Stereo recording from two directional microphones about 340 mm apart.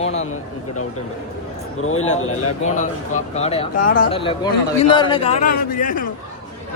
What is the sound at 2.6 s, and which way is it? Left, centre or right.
A man's voice, left.